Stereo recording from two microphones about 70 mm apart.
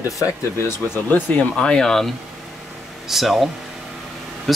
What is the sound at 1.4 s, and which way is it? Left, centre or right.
Speech, centre.